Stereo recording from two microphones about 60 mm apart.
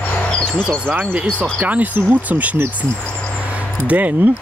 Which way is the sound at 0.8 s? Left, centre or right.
Right.